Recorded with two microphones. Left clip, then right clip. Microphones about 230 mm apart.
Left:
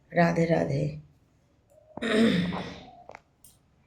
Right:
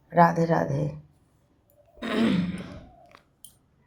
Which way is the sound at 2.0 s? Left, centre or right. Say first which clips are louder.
Left 2 dB; centre.